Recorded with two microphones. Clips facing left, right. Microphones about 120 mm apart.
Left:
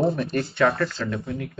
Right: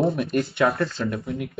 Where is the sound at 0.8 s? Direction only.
25° right (ahead or behind).